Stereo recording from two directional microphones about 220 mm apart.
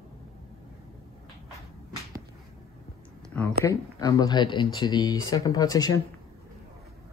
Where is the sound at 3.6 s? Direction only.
15° left (ahead or behind).